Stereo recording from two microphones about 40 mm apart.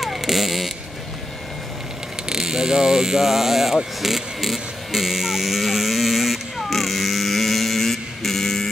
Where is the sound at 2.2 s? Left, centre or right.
Centre.